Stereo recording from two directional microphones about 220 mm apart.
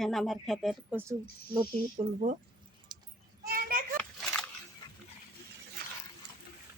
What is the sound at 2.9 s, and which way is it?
Keys jangling, 20° right (ahead or behind).